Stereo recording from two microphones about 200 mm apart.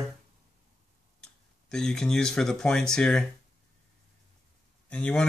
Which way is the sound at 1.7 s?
5° left (ahead or behind).